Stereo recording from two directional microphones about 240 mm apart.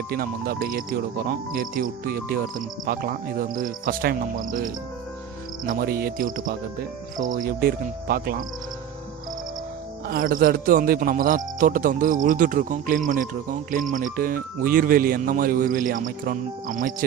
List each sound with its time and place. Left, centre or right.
0.1 s speech: right
10.1 s speech: right